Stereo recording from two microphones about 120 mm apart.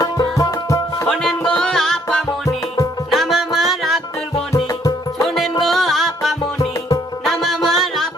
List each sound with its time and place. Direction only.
0.0 s music: 30° left (ahead or behind)
1.0 s music: 5° left (ahead or behind)
4.5 s music: 30° left (ahead or behind)
5.2 s music: centre (ahead or behind)
6.6 s music: 30° left (ahead or behind)
7.3 s music: centre (ahead or behind)